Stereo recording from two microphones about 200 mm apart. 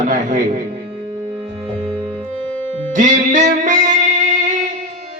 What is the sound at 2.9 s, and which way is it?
Music, 40° right (ahead or behind).